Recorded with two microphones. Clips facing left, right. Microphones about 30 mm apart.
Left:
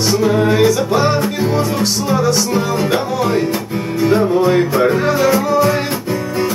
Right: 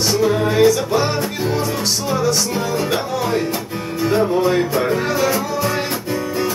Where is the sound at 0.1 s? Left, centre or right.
Centre.